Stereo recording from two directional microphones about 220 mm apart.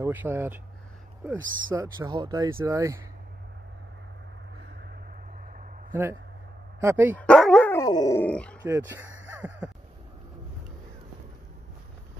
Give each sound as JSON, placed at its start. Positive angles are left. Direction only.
{"t": 0.0, "sound": "speech", "side_deg": -10}
{"t": 6.8, "sound": "speech", "side_deg": -10}
{"t": 7.2, "sound": "speech", "side_deg": 5}
{"t": 8.6, "sound": "speech", "side_deg": -10}